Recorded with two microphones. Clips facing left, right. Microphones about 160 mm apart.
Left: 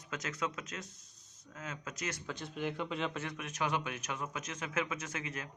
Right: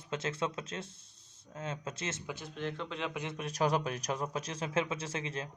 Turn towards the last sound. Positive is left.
turn(degrees=-30)  # may be behind; listen again after turning